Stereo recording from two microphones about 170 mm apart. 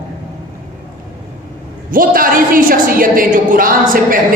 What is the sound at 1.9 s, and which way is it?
A man's voice, 55° right (ahead or behind).